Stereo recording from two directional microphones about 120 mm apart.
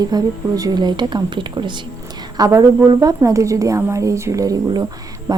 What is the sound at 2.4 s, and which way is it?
A woman's voice, 30° right (ahead or behind).